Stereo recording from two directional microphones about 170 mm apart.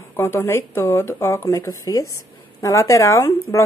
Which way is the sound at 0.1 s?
15° left (ahead or behind).